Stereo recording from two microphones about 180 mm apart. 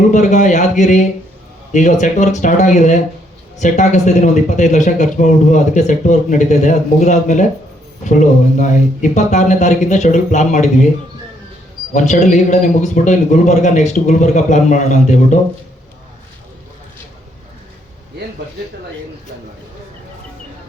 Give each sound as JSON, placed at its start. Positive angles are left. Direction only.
{"t": 0.1, "sound": "a man's voice", "side_deg": 40}
{"t": 11.9, "sound": "a man's voice", "side_deg": 40}